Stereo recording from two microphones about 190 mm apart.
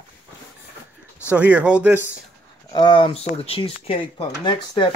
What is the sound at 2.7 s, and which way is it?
Speech, 25° left (ahead or behind).